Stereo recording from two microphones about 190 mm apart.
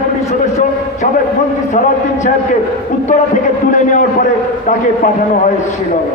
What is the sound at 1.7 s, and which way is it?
Speech, 40° left (ahead or behind).